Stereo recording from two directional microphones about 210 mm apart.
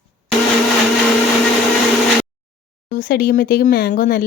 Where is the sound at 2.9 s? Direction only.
45° left (ahead or behind).